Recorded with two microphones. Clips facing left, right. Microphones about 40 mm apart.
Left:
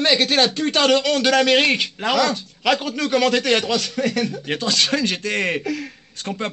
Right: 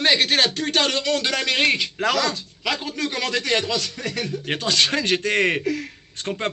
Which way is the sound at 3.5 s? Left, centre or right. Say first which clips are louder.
Left 3 dB; left.